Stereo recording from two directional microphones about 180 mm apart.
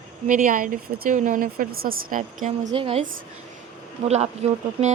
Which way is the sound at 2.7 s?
30° right (ahead or behind).